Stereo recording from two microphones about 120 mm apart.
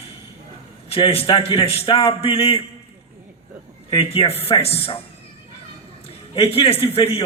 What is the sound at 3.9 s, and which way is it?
A man's voice, 50° left (ahead or behind).